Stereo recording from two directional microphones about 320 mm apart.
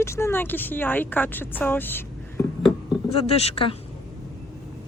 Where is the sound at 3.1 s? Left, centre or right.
Centre.